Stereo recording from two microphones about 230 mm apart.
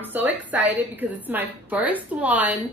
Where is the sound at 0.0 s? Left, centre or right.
Centre.